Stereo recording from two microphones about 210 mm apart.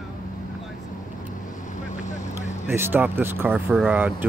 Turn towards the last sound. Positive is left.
turn(degrees=-10)  # may be behind; listen again after turning